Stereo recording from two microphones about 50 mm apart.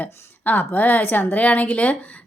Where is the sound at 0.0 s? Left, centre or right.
Left.